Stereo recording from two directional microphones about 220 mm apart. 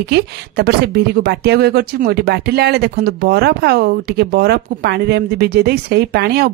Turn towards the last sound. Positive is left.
turn(degrees=-50)  # may be behind; listen again after turning